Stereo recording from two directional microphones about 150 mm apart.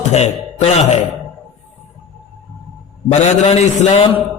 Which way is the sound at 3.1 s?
45° left (ahead or behind).